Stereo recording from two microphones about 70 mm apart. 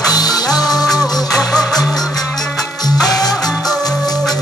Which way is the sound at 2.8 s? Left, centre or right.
Left.